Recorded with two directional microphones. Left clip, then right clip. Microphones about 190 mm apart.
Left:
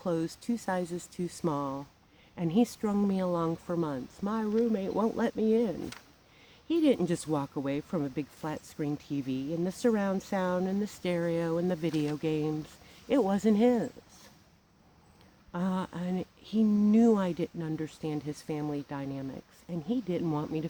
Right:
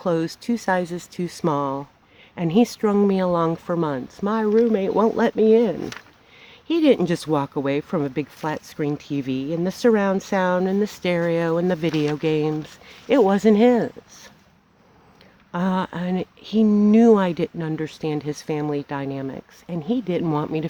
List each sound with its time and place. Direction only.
0.0 s speech: 40° right (ahead or behind)
15.5 s speech: 45° right (ahead or behind)